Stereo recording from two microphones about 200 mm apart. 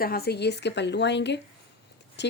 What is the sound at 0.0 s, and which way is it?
Speech, 50° left (ahead or behind).